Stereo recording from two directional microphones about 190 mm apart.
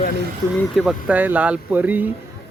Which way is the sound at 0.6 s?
Centre (ahead or behind).